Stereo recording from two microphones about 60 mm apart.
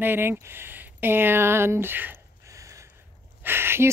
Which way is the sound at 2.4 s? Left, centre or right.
Right.